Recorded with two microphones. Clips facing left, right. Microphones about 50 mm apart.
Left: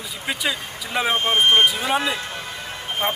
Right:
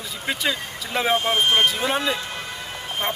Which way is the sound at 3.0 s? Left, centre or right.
Centre.